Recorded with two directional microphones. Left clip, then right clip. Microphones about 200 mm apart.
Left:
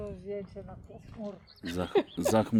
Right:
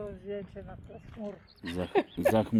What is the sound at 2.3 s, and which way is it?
Speech, 5° left (ahead or behind).